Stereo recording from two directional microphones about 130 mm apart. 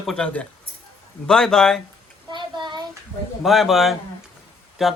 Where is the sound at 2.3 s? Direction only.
35° right (ahead or behind).